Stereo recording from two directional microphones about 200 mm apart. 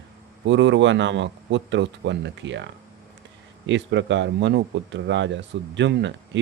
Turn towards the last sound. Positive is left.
turn(degrees=-60)  # may be behind; listen again after turning